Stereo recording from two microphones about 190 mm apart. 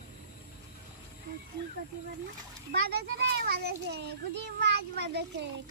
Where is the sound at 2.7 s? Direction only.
60° right (ahead or behind).